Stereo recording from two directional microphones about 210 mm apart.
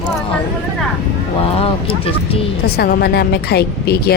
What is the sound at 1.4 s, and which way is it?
Speech, 25° left (ahead or behind).